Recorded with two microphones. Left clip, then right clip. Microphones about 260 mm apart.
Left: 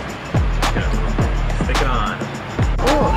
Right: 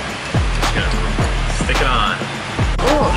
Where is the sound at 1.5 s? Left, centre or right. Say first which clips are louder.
Right 4 dB; centre.